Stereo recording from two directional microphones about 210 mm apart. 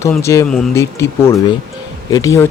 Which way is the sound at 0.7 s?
15° left (ahead or behind).